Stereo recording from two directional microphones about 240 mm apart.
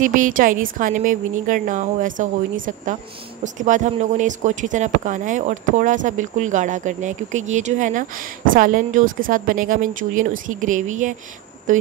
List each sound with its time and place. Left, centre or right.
0.0 s speech: right